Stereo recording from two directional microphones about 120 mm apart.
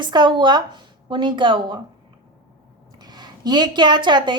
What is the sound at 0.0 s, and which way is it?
A woman's voice, 40° right (ahead or behind).